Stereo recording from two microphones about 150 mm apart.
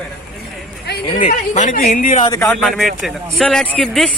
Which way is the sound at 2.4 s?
Centre (ahead or behind).